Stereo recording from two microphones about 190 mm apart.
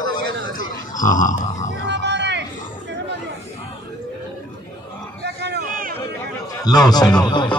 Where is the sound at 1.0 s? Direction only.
45° left (ahead or behind).